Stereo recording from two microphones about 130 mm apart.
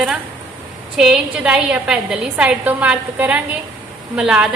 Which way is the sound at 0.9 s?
5° right (ahead or behind).